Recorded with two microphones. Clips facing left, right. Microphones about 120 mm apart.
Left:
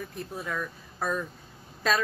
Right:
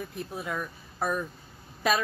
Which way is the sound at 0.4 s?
15° right (ahead or behind).